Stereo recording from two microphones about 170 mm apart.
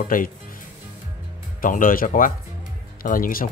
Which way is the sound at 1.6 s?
55° left (ahead or behind).